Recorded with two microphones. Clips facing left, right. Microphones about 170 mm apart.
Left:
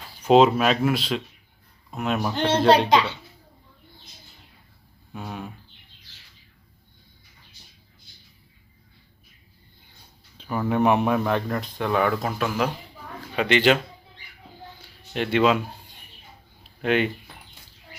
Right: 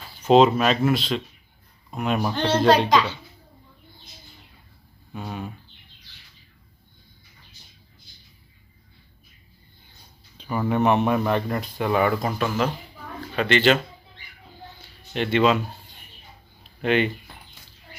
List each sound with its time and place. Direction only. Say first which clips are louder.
0.2 s speech: even; 5° left (ahead or behind)
2.3 s a child's voice: left 1 dB; 20° left (ahead or behind)
5.1 s speech: right 2 dB; centre (ahead or behind)
10.3 s a sound: right 1 dB; 5° right (ahead or behind)
10.7 s speech: even; 5° left (ahead or behind)
14.8 s a sound: right 1 dB; 5° left (ahead or behind)
16.8 s speech: right 1 dB; centre (ahead or behind)